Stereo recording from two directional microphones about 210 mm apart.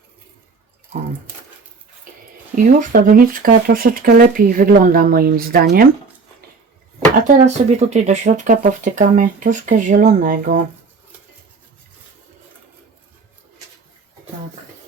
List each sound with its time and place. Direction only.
2.6 s speech: 40° right (ahead or behind)
7.3 s speech: 35° right (ahead or behind)